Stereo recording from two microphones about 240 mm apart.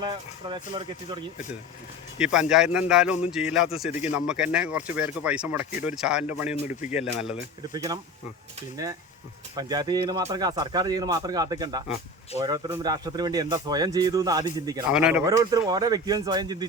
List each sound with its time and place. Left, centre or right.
0.0 s speech: centre
2.1 s speech: centre
7.7 s speech: centre
14.8 s speech: centre
15.2 s speech: centre